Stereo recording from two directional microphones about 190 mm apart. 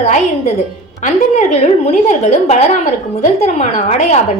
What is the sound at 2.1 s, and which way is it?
A woman's voice, 40° left (ahead or behind).